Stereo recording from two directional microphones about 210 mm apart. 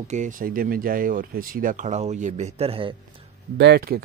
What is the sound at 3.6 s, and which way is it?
Speech, 50° right (ahead or behind).